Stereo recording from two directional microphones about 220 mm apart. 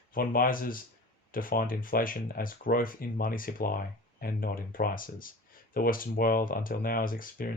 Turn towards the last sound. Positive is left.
turn(degrees=40)  # may be behind; listen again after turning